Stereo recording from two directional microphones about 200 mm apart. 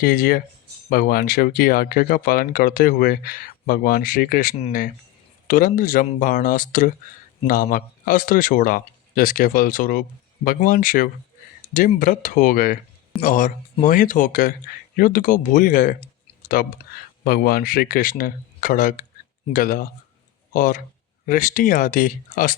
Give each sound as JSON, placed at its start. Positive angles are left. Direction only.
{"t": 0.0, "sound": "speech", "side_deg": 45}